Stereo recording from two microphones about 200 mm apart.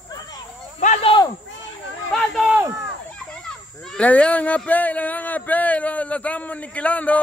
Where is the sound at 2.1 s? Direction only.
Centre (ahead or behind).